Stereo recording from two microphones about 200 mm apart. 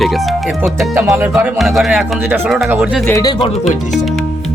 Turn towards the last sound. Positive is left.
turn(degrees=15)  # may be behind; listen again after turning